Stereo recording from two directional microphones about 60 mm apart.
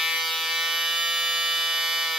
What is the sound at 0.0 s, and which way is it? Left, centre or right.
Fire alarm, centre.